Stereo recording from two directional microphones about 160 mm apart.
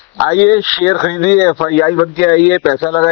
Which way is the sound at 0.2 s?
20° left (ahead or behind).